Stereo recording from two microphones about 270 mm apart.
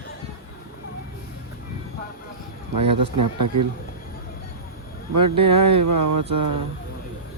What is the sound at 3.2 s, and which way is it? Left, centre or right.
Speech, right.